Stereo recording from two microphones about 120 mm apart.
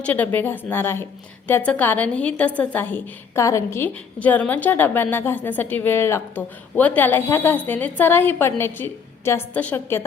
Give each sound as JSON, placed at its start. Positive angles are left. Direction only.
{"t": 0.0, "sound": "a woman's voice", "side_deg": 15}